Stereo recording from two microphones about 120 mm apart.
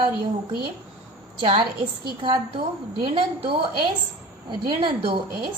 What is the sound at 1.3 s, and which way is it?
A woman's voice, 45° right (ahead or behind).